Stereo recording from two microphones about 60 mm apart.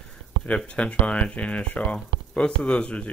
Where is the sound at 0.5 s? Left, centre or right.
Left.